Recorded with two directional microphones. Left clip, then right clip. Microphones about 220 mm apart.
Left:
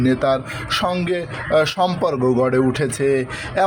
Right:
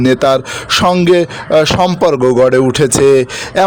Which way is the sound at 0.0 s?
40° right (ahead or behind).